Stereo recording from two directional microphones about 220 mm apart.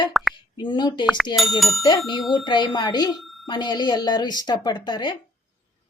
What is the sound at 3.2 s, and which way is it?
Alarm, centre (ahead or behind).